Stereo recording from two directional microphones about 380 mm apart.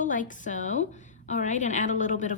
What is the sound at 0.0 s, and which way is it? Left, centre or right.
A woman's voice, centre.